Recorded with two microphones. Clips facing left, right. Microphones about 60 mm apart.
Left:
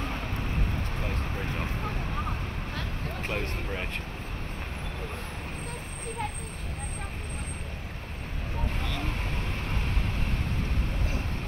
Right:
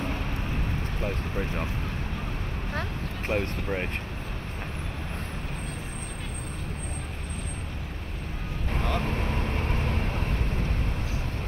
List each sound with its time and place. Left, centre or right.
2.7 s vehicle: right
8.7 s vehicle: right